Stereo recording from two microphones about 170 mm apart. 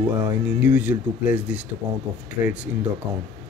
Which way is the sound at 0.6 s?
10° right (ahead or behind).